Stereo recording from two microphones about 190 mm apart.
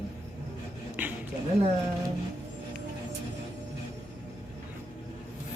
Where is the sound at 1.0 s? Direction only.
10° right (ahead or behind).